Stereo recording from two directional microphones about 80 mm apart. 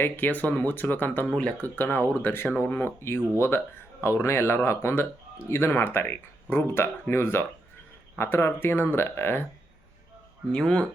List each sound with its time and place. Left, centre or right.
0.0 s speech: left
10.5 s speech: centre